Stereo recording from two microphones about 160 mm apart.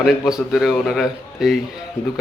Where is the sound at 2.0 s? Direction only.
15° left (ahead or behind).